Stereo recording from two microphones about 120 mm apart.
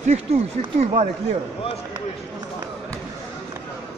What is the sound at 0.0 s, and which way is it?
Speech, 65° right (ahead or behind).